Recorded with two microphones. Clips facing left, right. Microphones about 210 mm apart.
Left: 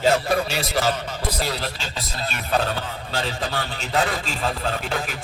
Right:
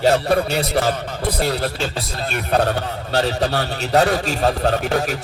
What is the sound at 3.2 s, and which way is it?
A man's voice, 40° right (ahead or behind).